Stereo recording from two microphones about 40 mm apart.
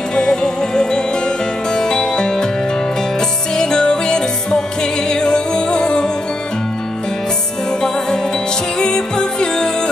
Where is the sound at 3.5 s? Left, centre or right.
Left.